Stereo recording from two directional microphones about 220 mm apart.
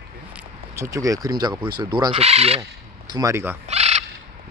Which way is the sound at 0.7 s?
15° right (ahead or behind).